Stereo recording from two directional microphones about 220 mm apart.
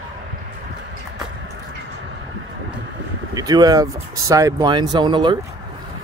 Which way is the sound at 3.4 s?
15° right (ahead or behind).